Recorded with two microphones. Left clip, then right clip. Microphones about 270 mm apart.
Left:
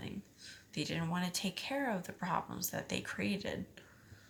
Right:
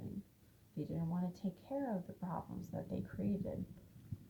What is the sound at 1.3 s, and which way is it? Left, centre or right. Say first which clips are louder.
Speech: left 10 dB; centre.